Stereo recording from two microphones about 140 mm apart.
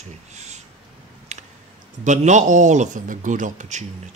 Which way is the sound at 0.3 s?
55° right (ahead or behind).